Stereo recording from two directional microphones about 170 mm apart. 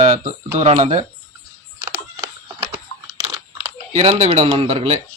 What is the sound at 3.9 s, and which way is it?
Speech, 40° right (ahead or behind).